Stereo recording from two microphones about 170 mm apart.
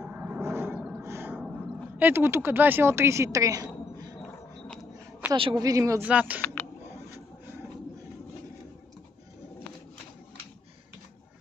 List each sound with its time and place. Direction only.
0.0 s a sound: 10° right (ahead or behind)
2.0 s speech: 10° right (ahead or behind)
5.3 s a woman's voice: 30° right (ahead or behind)
6.0 s speech: 10° right (ahead or behind)